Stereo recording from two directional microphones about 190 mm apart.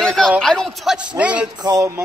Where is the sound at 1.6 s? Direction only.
20° right (ahead or behind).